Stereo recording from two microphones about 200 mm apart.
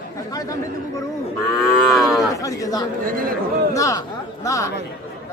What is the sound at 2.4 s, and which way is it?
Speech, 15° left (ahead or behind).